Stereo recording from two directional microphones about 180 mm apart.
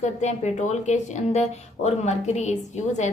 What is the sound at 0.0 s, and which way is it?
Speech, 40° left (ahead or behind).